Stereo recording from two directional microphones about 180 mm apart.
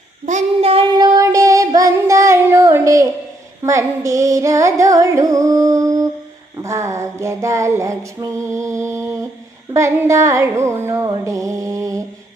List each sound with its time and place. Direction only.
0.3 s child singing: 35° right (ahead or behind); by 3.1 s 15° right (ahead or behind)
3.6 s music: 15° right (ahead or behind)